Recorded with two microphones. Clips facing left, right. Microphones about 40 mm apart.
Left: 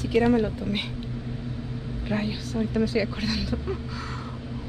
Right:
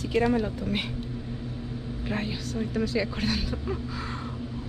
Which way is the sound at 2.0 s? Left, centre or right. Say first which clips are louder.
Left 3 dB; centre.